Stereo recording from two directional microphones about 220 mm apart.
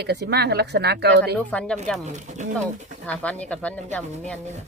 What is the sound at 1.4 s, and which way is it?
Speech, 5° left (ahead or behind).